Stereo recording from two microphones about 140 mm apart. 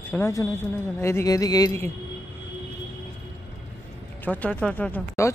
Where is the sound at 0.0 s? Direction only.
15° left (ahead or behind).